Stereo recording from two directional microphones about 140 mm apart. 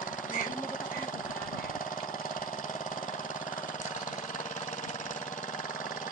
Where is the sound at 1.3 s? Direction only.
90° left; by 3.7 s 75° left (ahead or behind).